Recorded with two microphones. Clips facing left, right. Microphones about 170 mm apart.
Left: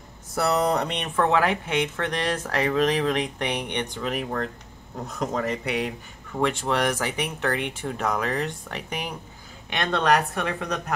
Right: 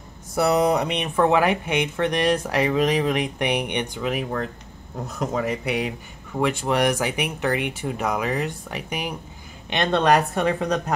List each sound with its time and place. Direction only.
0.4 s speech: 15° right (ahead or behind)
9.7 s speech: 25° right (ahead or behind)